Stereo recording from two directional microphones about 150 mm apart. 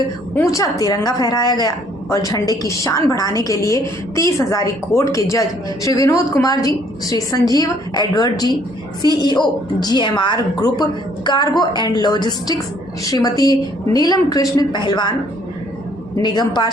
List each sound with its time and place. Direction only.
0.3 s a woman's voice: 20° left (ahead or behind)
16.2 s a woman's voice: 30° left (ahead or behind)